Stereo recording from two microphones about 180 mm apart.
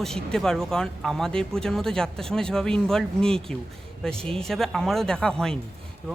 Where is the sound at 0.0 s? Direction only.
5° left (ahead or behind).